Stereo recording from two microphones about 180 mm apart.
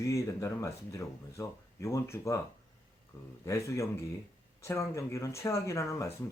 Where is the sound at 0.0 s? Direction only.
15° left (ahead or behind).